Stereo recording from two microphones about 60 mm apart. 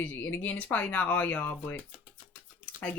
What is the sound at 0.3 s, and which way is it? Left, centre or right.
Speech, left.